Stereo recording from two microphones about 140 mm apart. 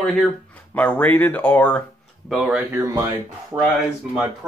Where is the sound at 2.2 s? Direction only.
5° right (ahead or behind).